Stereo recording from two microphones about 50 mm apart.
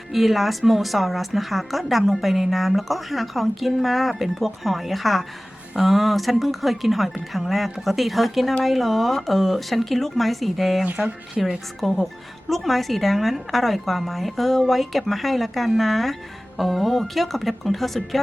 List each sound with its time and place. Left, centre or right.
0.1 s a woman's voice: centre
10.8 s speech: right
11.4 s a woman's voice: centre